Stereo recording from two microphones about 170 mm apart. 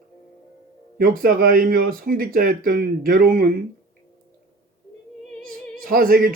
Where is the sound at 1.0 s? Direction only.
60° right (ahead or behind).